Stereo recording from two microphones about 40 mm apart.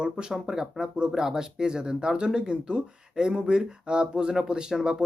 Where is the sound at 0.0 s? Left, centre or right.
Centre.